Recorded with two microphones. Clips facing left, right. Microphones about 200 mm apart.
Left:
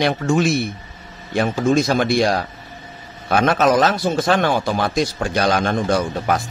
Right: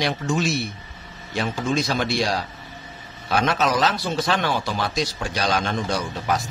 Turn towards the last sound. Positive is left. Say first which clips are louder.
# left 5 dB
turn(degrees=55)  # may be behind; listen again after turning